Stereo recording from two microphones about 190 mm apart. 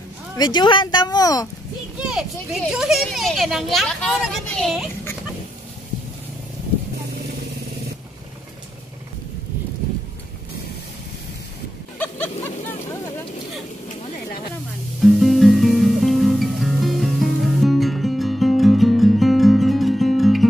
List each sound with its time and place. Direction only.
0.4 s speech: 25° left (ahead or behind)
2.0 s a child's voice: centre (ahead or behind)
12.0 s a sound: 10° left (ahead or behind)
15.0 s music: centre (ahead or behind)